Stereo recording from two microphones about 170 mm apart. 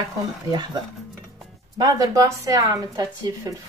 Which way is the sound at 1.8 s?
20° right (ahead or behind).